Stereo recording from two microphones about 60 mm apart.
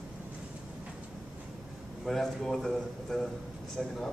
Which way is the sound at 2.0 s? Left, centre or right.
Centre.